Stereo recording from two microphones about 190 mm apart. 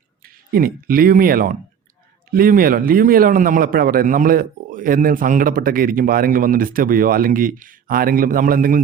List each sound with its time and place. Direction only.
0.2 s a man's voice: 50° right (ahead or behind)